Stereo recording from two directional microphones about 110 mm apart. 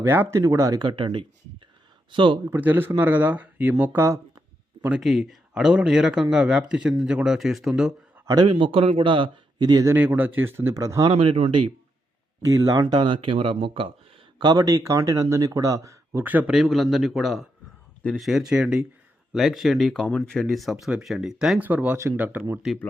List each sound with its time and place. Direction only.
0.0 s speech: 20° right (ahead or behind)
0.9 s speech: 50° right (ahead or behind)
2.5 s speech: 15° right (ahead or behind)
4.8 s speech: 5° right (ahead or behind)
8.4 s speech: 50° right (ahead or behind)
9.8 s speech: 20° right (ahead or behind)
11.1 s speech: 50° right (ahead or behind)
12.5 s speech: 30° right (ahead or behind); by 13.9 s 55° right (ahead or behind)
14.3 s speech: 40° right (ahead or behind)
16.2 s speech: 15° right (ahead or behind)
16.5 s speech: centre (ahead or behind)
21.6 s speech: 15° right (ahead or behind)